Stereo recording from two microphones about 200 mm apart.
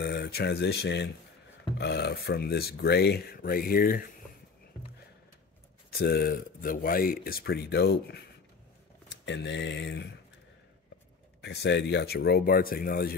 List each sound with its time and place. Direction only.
0.0 s speech: 55° left (ahead or behind)
5.9 s speech: 50° left (ahead or behind)
11.4 s speech: 60° left (ahead or behind)